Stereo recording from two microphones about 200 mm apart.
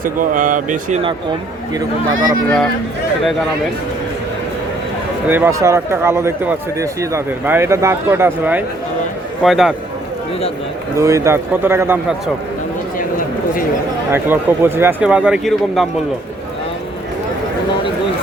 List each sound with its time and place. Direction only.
0.0 s speech: 40° right (ahead or behind)
5.3 s a man's voice: 10° right (ahead or behind)
10.9 s speech: 15° right (ahead or behind)
14.1 s a man's voice: 10° right (ahead or behind)